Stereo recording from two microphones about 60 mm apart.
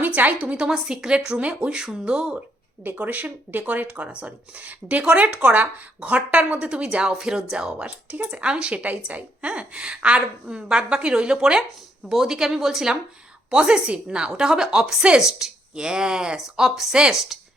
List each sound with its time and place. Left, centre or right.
0.0 s a woman's voice: right
2.8 s a woman's voice: right; by 17.4 s centre